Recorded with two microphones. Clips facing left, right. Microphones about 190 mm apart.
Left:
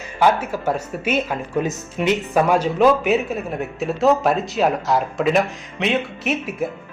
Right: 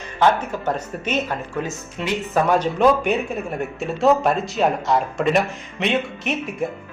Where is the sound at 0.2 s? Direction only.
10° left (ahead or behind).